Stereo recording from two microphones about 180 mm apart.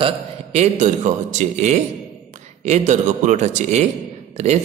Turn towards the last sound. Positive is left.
turn(degrees=-40)  # may be behind; listen again after turning